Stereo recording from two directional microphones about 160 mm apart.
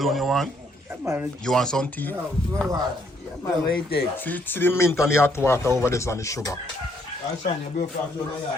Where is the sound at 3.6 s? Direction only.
70° left (ahead or behind).